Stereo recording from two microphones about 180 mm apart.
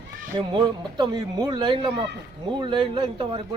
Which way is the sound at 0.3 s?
25° right (ahead or behind).